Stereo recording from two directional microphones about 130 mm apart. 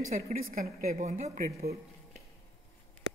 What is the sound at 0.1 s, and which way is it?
A woman's voice, 90° right.